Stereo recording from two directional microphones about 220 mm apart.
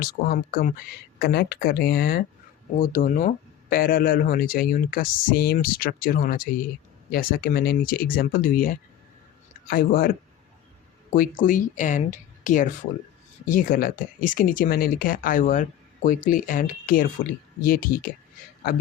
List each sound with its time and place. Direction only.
0.0 s speech: 40° left (ahead or behind)